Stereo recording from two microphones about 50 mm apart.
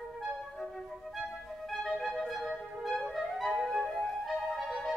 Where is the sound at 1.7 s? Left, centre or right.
Centre.